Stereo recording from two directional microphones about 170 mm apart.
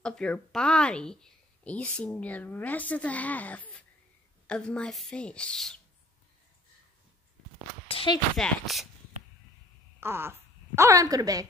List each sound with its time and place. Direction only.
0.0 s a woman's voice: 5° left (ahead or behind)
7.9 s speech: 30° left (ahead or behind)
8.4 s speech: centre (ahead or behind)
9.9 s speech: 15° right (ahead or behind)